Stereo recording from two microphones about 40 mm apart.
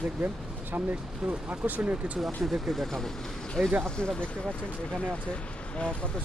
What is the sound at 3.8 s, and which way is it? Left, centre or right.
Speech, centre.